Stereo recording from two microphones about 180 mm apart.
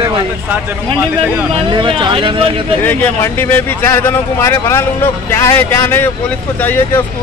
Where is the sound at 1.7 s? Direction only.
25° right (ahead or behind).